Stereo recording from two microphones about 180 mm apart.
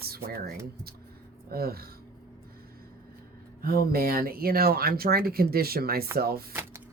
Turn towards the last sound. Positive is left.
turn(degrees=-15)  # may be behind; listen again after turning